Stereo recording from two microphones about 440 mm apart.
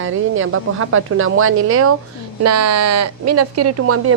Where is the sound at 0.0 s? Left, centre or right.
Right.